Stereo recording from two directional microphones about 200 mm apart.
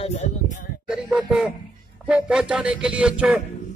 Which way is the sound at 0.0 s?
35° left (ahead or behind).